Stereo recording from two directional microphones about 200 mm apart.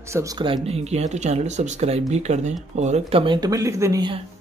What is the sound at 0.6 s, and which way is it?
Speech, 30° right (ahead or behind).